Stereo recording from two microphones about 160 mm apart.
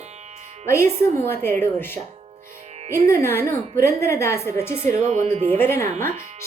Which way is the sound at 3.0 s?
15° left (ahead or behind).